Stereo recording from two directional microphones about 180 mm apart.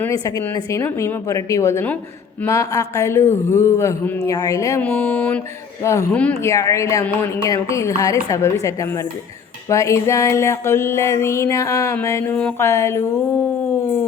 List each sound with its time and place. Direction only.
0.0 s music: 20° left (ahead or behind)